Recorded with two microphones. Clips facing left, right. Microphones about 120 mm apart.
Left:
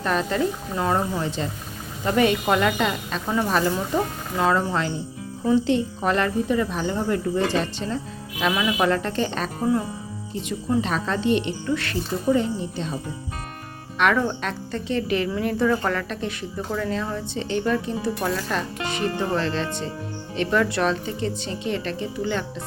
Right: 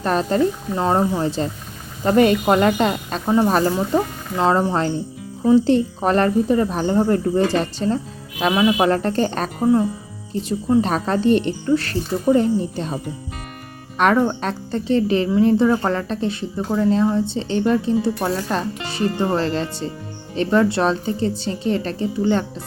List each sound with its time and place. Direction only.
0.0 s a woman's voice: 35° right (ahead or behind)
3.8 s a woman's voice: 25° right (ahead or behind); by 9.5 s 45° right (ahead or behind)
10.8 s a woman's voice: 45° right (ahead or behind)
14.0 s a woman's voice: 35° right (ahead or behind)